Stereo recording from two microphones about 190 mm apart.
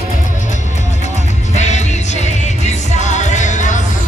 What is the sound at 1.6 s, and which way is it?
Music, 40° left (ahead or behind).